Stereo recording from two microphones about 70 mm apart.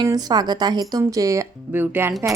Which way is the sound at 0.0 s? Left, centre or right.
Right.